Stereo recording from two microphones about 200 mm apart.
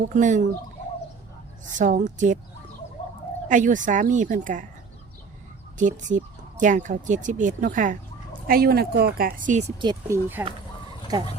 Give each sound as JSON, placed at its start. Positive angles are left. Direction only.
{"t": 0.1, "sound": "speech", "side_deg": -40}
{"t": 1.8, "sound": "speech", "side_deg": -40}
{"t": 3.5, "sound": "speech", "side_deg": -40}
{"t": 5.7, "sound": "speech", "side_deg": -40}
{"t": 9.8, "sound": "speech", "side_deg": -20}